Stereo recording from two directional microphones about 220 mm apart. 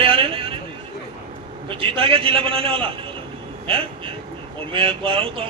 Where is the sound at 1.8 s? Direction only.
25° right (ahead or behind).